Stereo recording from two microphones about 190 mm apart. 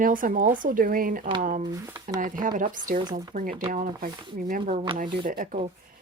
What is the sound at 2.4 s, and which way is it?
Speech, 45° right (ahead or behind).